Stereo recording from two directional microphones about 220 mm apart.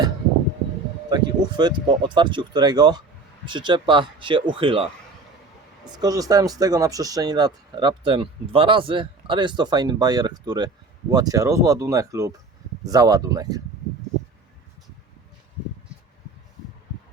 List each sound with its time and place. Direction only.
1.1 s speech: 20° right (ahead or behind)